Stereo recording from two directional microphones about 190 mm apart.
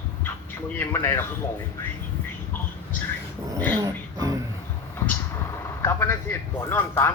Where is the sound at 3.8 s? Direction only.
20° right (ahead or behind).